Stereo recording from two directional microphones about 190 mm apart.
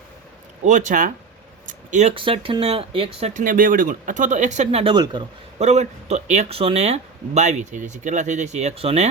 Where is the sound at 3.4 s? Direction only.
45° right (ahead or behind).